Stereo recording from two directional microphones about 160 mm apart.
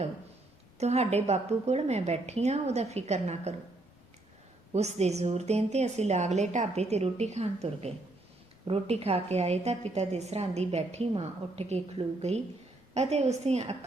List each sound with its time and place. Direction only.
0.8 s a woman's voice: 45° right (ahead or behind)
4.7 s a woman's voice: 45° right (ahead or behind)